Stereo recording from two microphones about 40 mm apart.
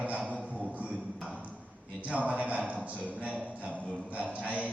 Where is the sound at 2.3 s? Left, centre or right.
Right.